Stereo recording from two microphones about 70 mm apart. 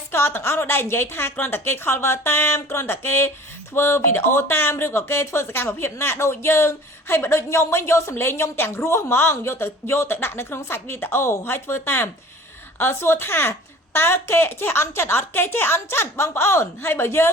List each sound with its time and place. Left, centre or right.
0.1 s a woman's voice: left